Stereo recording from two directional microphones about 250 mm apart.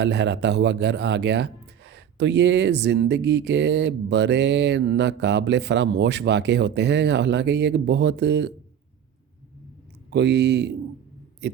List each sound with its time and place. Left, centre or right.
0.0 s a man's voice: right
10.1 s a man's voice: right